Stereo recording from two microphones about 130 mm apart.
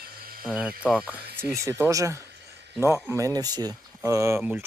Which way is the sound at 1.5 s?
25° right (ahead or behind).